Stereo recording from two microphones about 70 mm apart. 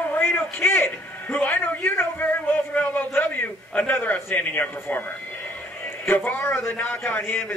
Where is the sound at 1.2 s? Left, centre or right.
Left.